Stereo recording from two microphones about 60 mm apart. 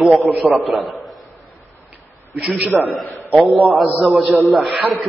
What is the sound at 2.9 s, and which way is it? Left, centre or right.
A man's voice, centre.